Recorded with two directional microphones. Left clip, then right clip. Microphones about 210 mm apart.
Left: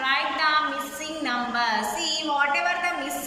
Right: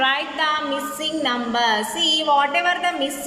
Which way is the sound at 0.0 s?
35° right (ahead or behind).